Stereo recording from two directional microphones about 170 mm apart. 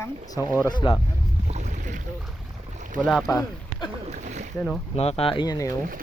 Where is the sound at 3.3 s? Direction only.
20° left (ahead or behind).